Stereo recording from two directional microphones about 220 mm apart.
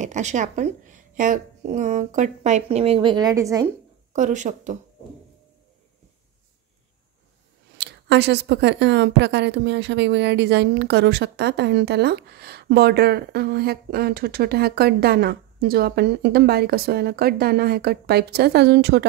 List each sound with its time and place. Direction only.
0.0 s speech: 30° right (ahead or behind); by 3.7 s 15° right (ahead or behind)
4.1 s speech: 35° right (ahead or behind)
7.7 s speech: 50° right (ahead or behind)